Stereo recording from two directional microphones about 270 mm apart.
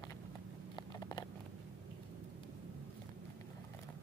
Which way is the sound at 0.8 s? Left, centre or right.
Centre.